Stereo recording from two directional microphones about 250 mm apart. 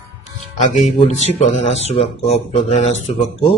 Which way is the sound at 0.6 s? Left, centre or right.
Left.